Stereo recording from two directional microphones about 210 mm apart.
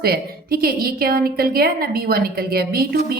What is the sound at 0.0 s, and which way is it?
A woman's voice, 45° right (ahead or behind).